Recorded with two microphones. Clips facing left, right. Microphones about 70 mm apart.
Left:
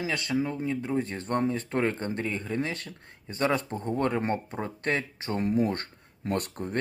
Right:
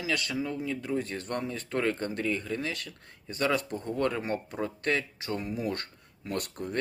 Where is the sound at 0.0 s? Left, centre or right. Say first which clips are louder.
Left 3 dB; left.